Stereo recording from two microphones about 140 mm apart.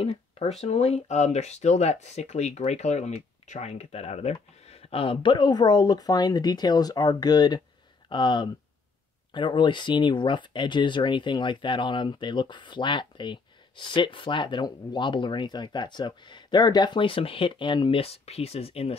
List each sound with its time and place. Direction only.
0.0 s speech: 45° left (ahead or behind)